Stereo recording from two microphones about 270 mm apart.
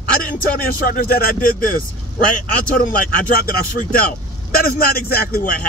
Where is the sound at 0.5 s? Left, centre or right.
Left.